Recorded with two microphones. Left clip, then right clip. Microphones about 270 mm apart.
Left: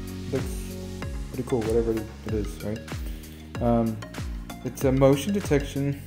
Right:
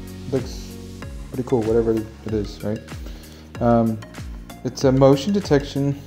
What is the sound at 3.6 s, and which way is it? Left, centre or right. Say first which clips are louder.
Speech: right 6 dB; centre.